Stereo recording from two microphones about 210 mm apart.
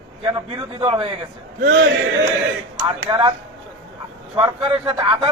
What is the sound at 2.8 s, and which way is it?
Speech, 20° right (ahead or behind).